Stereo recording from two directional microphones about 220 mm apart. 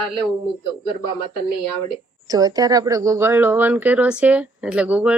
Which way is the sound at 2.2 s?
15° right (ahead or behind).